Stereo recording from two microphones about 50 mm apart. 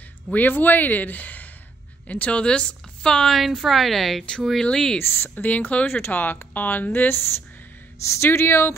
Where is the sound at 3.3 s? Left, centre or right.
Centre.